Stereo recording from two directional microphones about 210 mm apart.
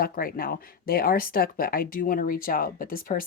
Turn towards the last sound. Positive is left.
turn(degrees=40)  # may be behind; listen again after turning